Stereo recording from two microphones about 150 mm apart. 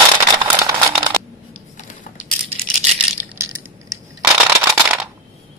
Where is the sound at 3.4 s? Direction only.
15° right (ahead or behind).